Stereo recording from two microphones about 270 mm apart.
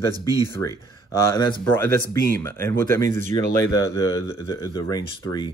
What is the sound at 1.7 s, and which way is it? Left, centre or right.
Speech, centre.